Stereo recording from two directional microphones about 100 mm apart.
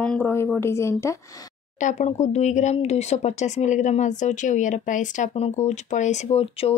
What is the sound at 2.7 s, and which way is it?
Speech, 90° left.